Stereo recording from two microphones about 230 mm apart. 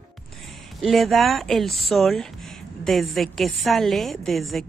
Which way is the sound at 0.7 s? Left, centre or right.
Centre.